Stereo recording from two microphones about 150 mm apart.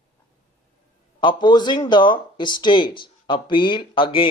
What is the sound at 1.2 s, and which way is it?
A man's voice, 30° left (ahead or behind).